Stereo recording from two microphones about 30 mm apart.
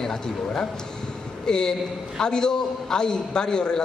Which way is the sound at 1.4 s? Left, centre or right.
Left.